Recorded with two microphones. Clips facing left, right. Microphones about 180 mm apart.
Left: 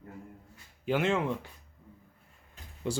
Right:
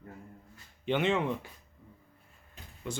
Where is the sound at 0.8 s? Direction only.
5° left (ahead or behind).